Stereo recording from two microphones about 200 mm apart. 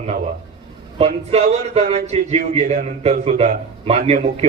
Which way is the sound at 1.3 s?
30° right (ahead or behind).